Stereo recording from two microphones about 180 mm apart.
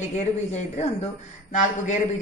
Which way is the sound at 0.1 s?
40° left (ahead or behind).